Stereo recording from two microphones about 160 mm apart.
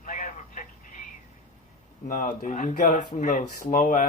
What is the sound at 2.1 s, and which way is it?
Speech, 55° left (ahead or behind).